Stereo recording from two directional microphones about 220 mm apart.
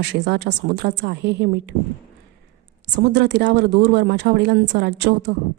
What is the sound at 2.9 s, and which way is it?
Speech, 50° right (ahead or behind).